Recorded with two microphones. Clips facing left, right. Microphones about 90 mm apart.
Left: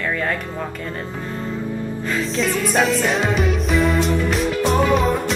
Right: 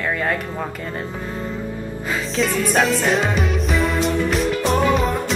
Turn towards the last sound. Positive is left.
turn(degrees=0)  # may be behind; listen again after turning